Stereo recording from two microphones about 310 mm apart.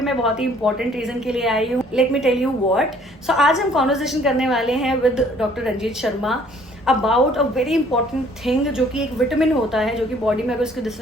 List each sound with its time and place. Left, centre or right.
0.0 s a woman's voice: centre